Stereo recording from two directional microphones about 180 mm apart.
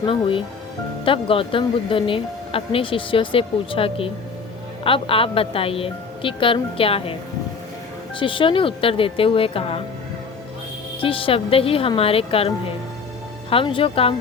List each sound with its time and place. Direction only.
0.0 s speech: 30° left (ahead or behind)
8.2 s speech: 30° left (ahead or behind)
11.0 s speech: 30° left (ahead or behind)